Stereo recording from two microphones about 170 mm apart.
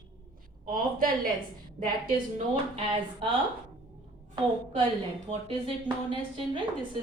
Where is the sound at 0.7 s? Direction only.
55° right (ahead or behind).